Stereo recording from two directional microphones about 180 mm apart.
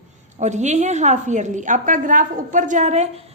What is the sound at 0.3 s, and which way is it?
A woman's voice, 40° right (ahead or behind).